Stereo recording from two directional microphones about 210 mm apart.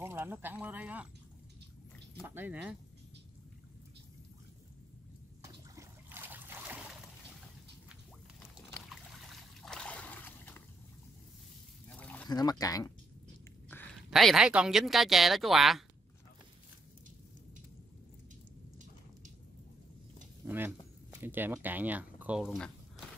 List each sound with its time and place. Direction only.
0.0 s speech: 10° right (ahead or behind)
2.2 s speech: 10° right (ahead or behind)
5.4 s trickle: 15° right (ahead or behind)
9.3 s trickle: 5° left (ahead or behind)
12.0 s a sound: 5° left (ahead or behind)
12.3 s speech: 20° left (ahead or behind)
14.1 s speech: centre (ahead or behind)
20.4 s speech: 10° right (ahead or behind)